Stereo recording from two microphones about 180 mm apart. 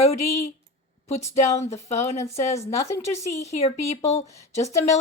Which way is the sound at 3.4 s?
35° left (ahead or behind).